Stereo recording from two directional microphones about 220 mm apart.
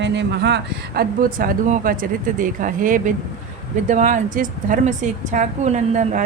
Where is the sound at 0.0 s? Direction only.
50° right (ahead or behind).